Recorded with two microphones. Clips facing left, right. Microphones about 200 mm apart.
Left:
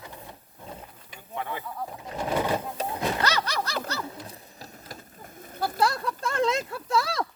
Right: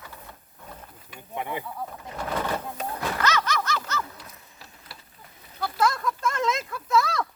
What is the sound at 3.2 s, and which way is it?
Speech, 35° left (ahead or behind).